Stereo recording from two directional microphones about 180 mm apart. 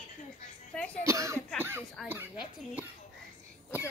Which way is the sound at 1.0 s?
15° right (ahead or behind).